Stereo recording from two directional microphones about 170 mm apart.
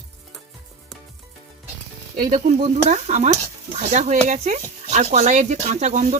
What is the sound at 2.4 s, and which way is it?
Speech, 45° right (ahead or behind).